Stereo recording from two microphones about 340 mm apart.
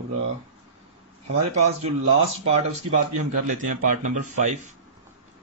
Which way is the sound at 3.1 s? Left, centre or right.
Right.